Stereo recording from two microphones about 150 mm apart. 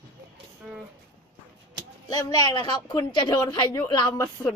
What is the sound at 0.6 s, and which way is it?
Speech, 10° right (ahead or behind).